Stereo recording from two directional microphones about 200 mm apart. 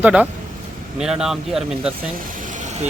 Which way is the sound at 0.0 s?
5° right (ahead or behind).